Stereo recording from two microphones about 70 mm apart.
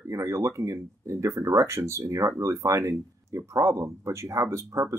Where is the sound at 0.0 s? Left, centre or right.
Right.